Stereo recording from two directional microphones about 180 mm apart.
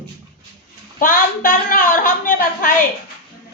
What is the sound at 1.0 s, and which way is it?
A woman's voice, 50° left (ahead or behind).